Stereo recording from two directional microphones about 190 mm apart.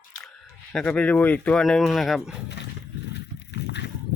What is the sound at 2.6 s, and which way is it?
Roaring cats, 65° left (ahead or behind).